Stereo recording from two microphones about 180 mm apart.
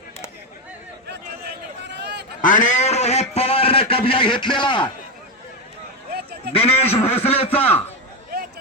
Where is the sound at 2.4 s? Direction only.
45° left (ahead or behind); by 4.9 s 25° left (ahead or behind).